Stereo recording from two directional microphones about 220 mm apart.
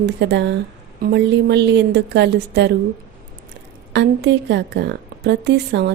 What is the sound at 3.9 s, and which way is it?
A woman's voice, 55° right (ahead or behind).